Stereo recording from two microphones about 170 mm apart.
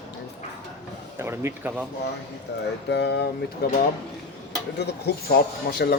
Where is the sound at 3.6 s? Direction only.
70° left (ahead or behind).